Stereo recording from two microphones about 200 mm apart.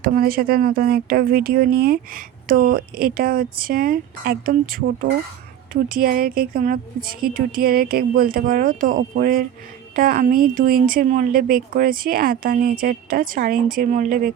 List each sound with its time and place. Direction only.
0.0 s speech: 45° right (ahead or behind)